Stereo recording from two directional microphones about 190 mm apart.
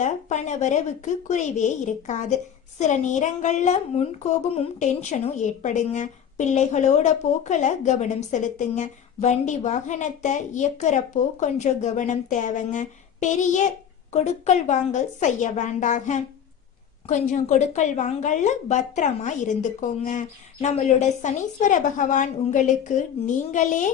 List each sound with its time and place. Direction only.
0.0 s a woman's voice: 40° left (ahead or behind)